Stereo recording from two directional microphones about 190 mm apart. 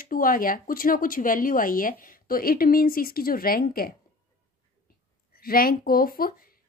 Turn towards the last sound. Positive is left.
turn(degrees=50)  # may be behind; listen again after turning